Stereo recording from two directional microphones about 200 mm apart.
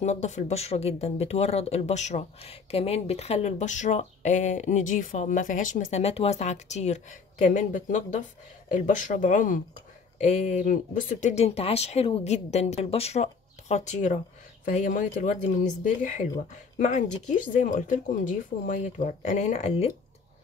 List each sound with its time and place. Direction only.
0.0 s speech: 35° left (ahead or behind)
16.8 s speech: 35° left (ahead or behind)